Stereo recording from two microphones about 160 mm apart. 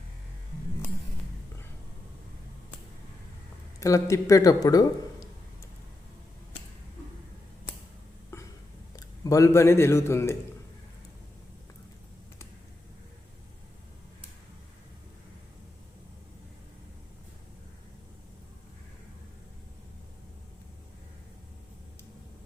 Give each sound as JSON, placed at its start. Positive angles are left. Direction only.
{"t": 3.8, "sound": "speech", "side_deg": 20}
{"t": 8.3, "sound": "a sound", "side_deg": 15}
{"t": 9.0, "sound": "speech", "side_deg": 20}